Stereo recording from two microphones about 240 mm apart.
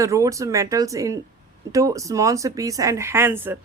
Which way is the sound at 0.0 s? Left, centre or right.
Centre.